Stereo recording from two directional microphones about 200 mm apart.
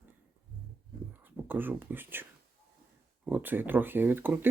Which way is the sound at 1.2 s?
10° right (ahead or behind).